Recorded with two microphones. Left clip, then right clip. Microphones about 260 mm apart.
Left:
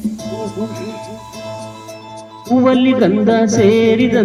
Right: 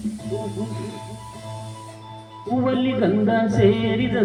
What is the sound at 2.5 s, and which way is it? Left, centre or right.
Music, left.